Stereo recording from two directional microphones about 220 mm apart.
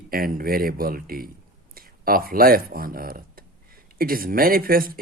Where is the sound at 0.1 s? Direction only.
40° right (ahead or behind).